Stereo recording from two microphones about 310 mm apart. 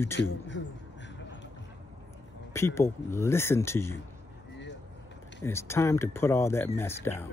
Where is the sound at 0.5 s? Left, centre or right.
Left.